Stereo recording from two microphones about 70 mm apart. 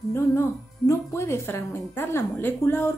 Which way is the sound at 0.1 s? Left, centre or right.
Left.